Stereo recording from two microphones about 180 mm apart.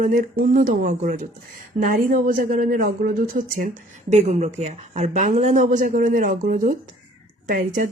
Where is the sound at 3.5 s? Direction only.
45° right (ahead or behind).